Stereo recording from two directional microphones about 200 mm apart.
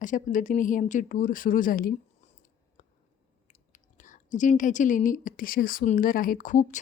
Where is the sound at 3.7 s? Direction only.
40° left (ahead or behind).